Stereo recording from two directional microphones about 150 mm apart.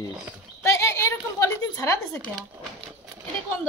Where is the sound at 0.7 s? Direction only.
20° left (ahead or behind).